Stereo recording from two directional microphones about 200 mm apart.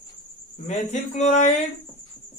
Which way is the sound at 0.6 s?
35° left (ahead or behind).